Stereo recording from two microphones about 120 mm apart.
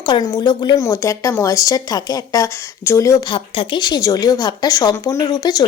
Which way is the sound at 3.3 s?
45° left (ahead or behind).